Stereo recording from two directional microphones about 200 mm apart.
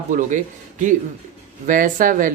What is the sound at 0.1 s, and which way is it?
Speech, 40° right (ahead or behind).